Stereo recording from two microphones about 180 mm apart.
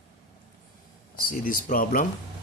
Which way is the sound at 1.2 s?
50° left (ahead or behind).